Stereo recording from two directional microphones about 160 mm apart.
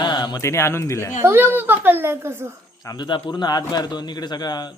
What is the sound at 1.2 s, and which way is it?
A woman's voice, 15° right (ahead or behind).